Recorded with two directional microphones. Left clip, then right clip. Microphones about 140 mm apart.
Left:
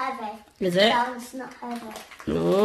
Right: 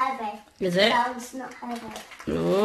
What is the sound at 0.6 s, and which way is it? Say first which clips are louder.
Speech: left 1 dB; 15° left (ahead or behind).